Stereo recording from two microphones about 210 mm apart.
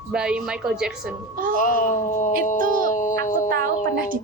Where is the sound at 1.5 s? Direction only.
40° left (ahead or behind).